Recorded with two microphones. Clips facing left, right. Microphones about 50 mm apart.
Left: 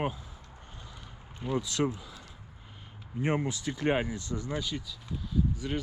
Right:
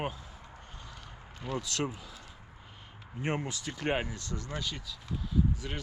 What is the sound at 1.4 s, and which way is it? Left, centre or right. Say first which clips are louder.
Speech: left 4 dB; centre.